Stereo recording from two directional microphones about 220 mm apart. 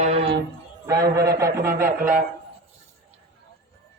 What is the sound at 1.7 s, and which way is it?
Mantra, 40° right (ahead or behind).